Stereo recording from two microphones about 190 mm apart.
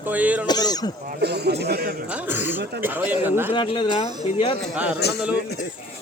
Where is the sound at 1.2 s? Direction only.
60° right (ahead or behind).